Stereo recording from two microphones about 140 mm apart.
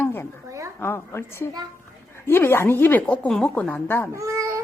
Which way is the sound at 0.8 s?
15° left (ahead or behind).